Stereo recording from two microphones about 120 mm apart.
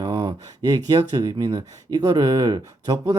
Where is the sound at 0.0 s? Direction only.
25° right (ahead or behind).